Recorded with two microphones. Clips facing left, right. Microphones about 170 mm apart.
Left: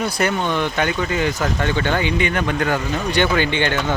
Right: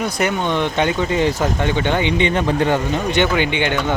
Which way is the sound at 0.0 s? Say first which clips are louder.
Right 1 dB; 20° right (ahead or behind).